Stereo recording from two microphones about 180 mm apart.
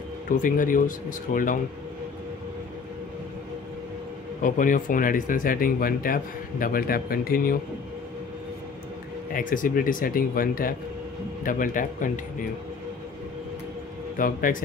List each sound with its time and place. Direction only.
0.3 s speech: 45° left (ahead or behind)
4.4 s speech: 45° left (ahead or behind)
9.3 s speech: 50° left (ahead or behind)
14.1 s speech: 50° left (ahead or behind)